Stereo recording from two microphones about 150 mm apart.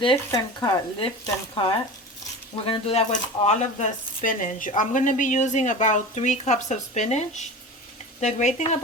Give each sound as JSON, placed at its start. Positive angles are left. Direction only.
{"t": 0.3, "sound": "speech", "side_deg": 35}